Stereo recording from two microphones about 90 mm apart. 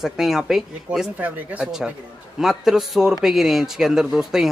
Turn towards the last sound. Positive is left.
turn(degrees=-5)  # may be behind; listen again after turning